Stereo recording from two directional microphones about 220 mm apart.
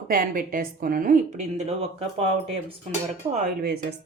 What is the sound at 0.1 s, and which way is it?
A woman's voice, 40° right (ahead or behind).